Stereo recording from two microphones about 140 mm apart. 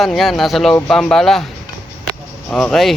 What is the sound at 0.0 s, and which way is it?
Speech, centre (ahead or behind).